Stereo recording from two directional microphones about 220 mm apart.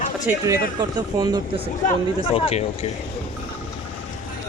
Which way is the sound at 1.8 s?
25° left (ahead or behind).